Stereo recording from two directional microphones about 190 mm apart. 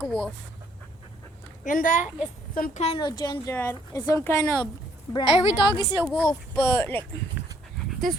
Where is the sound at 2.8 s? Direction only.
30° left (ahead or behind).